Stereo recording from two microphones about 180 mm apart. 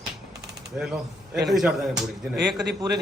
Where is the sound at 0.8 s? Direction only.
5° right (ahead or behind).